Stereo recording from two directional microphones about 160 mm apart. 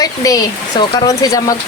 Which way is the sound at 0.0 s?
20° left (ahead or behind).